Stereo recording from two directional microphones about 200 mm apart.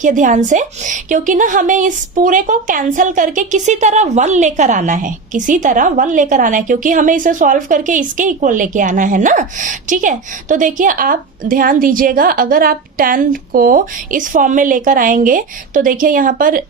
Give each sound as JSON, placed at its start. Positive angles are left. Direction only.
{"t": 0.0, "sound": "a woman's voice", "side_deg": -40}